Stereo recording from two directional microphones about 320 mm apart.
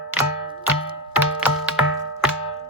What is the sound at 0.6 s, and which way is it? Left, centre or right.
Music, centre.